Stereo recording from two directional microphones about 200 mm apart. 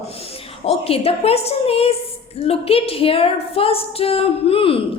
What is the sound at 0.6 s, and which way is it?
A woman's voice, 30° left (ahead or behind).